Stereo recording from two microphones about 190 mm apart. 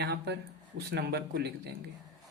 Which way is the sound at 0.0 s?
60° right (ahead or behind).